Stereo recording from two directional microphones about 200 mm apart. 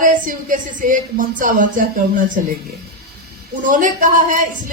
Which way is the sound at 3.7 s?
40° right (ahead or behind).